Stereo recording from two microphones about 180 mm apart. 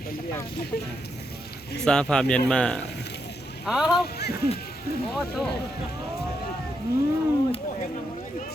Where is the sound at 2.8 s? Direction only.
65° left (ahead or behind).